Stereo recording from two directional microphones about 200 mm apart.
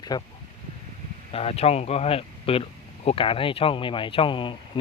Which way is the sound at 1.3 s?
30° left (ahead or behind).